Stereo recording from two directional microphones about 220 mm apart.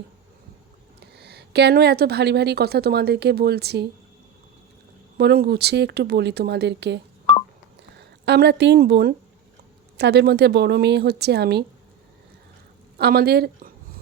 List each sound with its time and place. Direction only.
0.9 s a woman's voice: 50° right (ahead or behind)
5.1 s speech: 45° right (ahead or behind)
8.2 s speech: 50° right (ahead or behind)
13.0 s speech: 45° right (ahead or behind)